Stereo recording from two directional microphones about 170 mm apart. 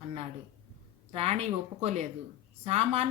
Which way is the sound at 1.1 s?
35° right (ahead or behind).